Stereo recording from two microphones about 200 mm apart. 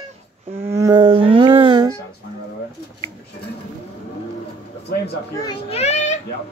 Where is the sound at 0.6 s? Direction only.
15° right (ahead or behind).